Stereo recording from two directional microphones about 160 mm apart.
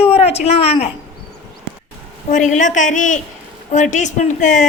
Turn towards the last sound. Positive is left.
turn(degrees=50)  # may be behind; listen again after turning